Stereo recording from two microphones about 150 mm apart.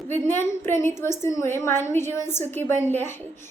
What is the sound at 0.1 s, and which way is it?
A woman's voice, 15° left (ahead or behind).